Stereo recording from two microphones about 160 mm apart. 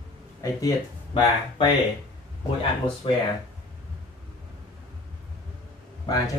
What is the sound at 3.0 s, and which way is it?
Speech, 35° left (ahead or behind).